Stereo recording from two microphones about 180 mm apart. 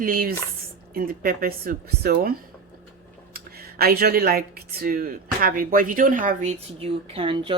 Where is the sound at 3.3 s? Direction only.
60° right (ahead or behind).